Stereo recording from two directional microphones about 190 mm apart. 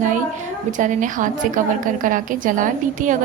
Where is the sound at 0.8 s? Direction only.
40° right (ahead or behind).